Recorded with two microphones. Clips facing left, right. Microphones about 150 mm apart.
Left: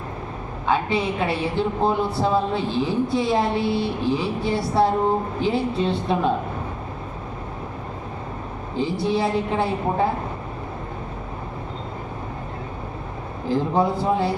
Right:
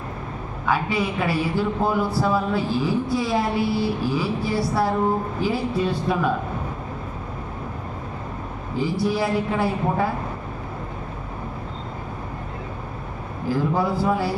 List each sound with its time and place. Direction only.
0.6 s a woman's voice: 25° left (ahead or behind)
8.8 s a woman's voice: 25° left (ahead or behind)
13.5 s a woman's voice: 20° left (ahead or behind)